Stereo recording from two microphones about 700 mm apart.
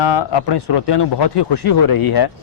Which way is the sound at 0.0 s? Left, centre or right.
Left.